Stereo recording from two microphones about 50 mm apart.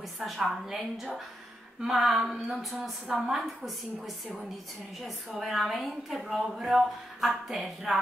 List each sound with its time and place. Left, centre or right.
0.4 s a woman's voice: centre
3.1 s a woman's voice: centre
5.0 s a woman's voice: centre